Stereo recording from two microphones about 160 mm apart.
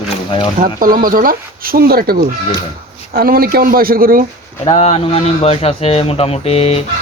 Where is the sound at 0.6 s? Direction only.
60° right (ahead or behind).